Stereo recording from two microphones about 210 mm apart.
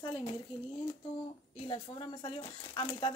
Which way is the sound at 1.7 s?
25° left (ahead or behind).